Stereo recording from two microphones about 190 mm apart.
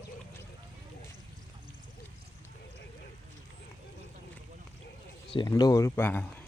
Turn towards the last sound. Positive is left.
turn(degrees=10)  # may be behind; listen again after turning